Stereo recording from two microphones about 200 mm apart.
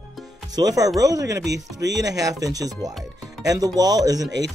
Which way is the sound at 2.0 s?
15° right (ahead or behind).